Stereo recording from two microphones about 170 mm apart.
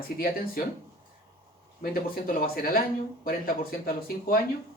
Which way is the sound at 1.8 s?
60° left (ahead or behind).